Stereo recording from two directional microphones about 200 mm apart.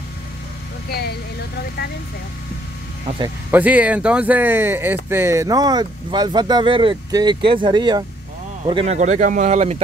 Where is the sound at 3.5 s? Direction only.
10° right (ahead or behind).